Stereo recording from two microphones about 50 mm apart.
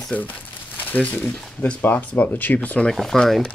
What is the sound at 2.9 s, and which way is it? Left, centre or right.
Speech, centre.